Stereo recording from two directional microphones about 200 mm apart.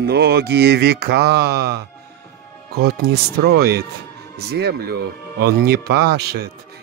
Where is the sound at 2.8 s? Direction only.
55° right (ahead or behind).